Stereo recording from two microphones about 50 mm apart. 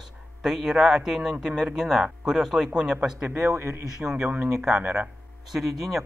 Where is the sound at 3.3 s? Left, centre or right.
Right.